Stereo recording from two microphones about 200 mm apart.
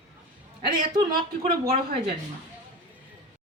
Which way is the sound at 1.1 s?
50° right (ahead or behind).